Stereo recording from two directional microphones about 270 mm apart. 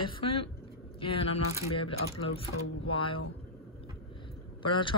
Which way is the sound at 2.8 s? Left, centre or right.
Centre.